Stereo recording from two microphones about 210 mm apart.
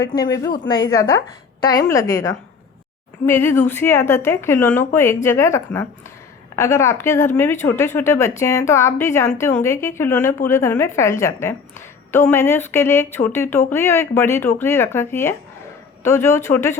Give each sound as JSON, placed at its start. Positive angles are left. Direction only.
{"t": 0.0, "sound": "speech", "side_deg": 15}